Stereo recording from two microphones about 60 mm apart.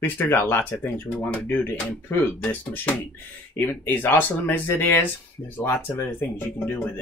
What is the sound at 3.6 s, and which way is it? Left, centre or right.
Speech, left.